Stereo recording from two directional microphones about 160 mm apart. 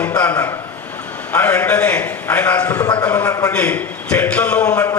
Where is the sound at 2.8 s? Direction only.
20° left (ahead or behind).